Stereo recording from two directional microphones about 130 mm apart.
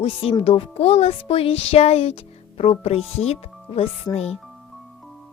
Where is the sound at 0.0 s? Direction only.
45° left (ahead or behind).